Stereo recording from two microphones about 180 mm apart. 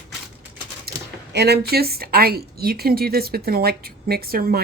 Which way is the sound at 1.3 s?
65° right (ahead or behind).